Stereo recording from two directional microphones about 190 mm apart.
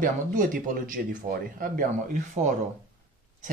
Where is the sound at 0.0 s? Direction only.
45° right (ahead or behind).